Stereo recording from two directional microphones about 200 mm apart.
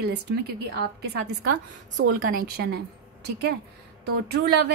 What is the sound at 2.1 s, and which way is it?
Speech, 45° right (ahead or behind).